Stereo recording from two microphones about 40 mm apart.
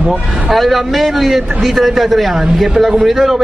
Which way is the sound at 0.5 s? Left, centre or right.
Centre.